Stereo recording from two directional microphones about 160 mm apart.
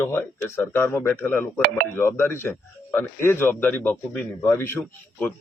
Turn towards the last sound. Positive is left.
turn(degrees=10)  # may be behind; listen again after turning